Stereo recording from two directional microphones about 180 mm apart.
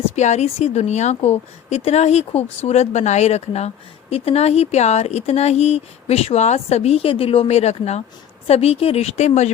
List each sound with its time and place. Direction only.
0.2 s speech: 40° left (ahead or behind)